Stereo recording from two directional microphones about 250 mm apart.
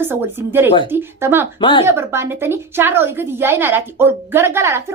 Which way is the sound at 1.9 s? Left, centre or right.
Centre.